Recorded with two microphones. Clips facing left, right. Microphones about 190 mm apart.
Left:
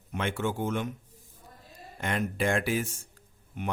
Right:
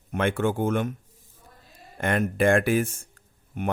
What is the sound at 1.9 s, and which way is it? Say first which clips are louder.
Speech: right 6 dB; 55° right (ahead or behind).